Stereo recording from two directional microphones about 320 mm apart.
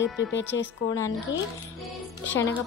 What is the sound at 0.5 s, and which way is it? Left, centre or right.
Speech, left.